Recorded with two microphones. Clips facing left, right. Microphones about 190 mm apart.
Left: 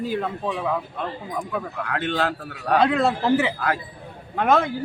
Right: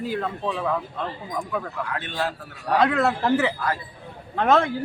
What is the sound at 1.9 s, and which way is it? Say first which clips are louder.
Speech: left 6 dB; 75° left (ahead or behind).